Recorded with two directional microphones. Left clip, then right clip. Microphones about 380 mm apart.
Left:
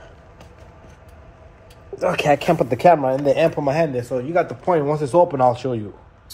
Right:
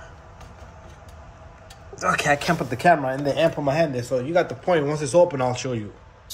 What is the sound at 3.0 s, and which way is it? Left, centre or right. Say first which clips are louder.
Speech: left 4 dB; left.